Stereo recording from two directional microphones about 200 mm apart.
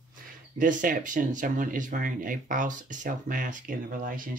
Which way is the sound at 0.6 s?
40° right (ahead or behind).